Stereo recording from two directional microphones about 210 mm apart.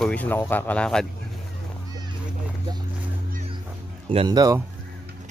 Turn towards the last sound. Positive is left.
turn(degrees=-20)  # may be behind; listen again after turning